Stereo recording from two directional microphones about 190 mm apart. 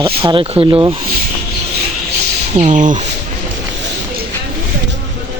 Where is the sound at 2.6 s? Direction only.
40° right (ahead or behind).